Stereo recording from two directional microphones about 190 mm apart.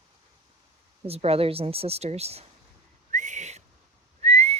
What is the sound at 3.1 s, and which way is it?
Whistling, 40° right (ahead or behind).